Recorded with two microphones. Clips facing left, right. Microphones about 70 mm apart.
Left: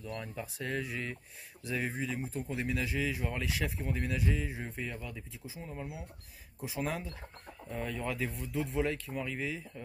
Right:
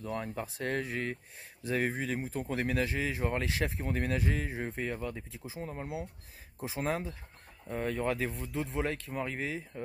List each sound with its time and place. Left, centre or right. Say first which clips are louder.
0.2 s speech: right 4 dB; right